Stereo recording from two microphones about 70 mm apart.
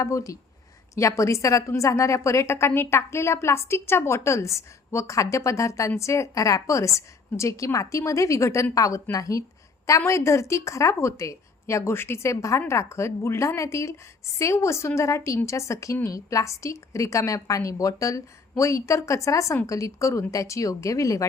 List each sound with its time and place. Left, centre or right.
0.0 s a woman's voice: left